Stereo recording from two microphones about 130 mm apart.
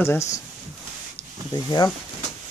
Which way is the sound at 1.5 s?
35° left (ahead or behind).